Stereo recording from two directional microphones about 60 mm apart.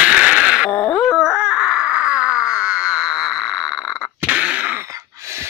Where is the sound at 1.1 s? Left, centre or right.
Centre.